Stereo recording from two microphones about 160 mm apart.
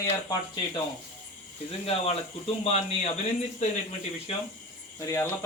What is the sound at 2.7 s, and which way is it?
A man's voice, 40° left (ahead or behind).